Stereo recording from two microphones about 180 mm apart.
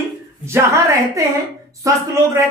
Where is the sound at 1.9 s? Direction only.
15° right (ahead or behind).